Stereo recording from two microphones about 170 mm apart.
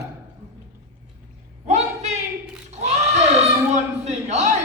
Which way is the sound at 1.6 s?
40° right (ahead or behind).